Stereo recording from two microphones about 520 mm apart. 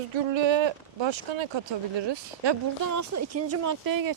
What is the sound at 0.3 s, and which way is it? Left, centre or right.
Speech, right.